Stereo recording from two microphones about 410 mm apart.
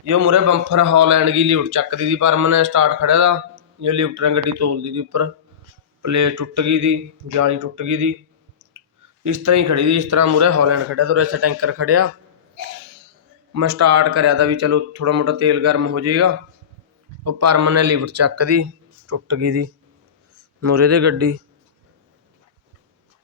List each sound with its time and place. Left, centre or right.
0.1 s a man's voice: right
9.2 s a man's voice: right
13.5 s a man's voice: right